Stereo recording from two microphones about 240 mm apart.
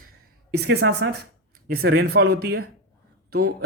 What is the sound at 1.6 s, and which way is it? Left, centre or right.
Speech, right.